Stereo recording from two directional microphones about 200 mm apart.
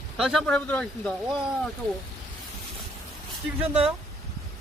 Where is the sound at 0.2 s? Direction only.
Centre (ahead or behind).